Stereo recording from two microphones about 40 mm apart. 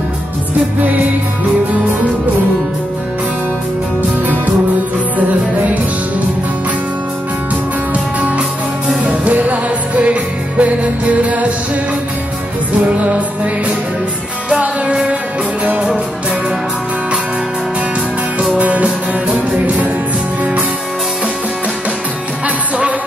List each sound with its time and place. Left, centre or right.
0.7 s music: right
9.0 s music: right
12.8 s music: right
18.6 s music: right